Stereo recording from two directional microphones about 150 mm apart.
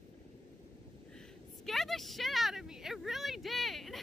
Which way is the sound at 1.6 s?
Centre (ahead or behind).